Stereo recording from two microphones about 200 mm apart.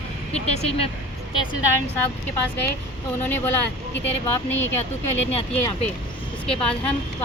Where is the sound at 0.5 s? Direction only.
30° left (ahead or behind).